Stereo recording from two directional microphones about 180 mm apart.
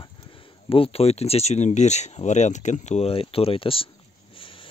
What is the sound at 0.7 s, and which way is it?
Speech, 30° left (ahead or behind).